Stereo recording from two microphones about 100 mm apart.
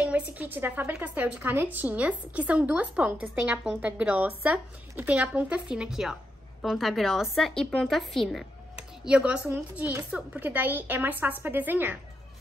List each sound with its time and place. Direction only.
0.0 s a woman's voice: 15° right (ahead or behind)
9.0 s a woman's voice: 10° right (ahead or behind)